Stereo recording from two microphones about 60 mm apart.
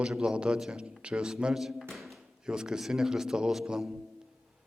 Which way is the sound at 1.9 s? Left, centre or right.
Centre.